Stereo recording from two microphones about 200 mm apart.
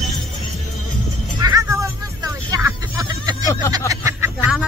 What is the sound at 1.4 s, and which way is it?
Music, 15° right (ahead or behind).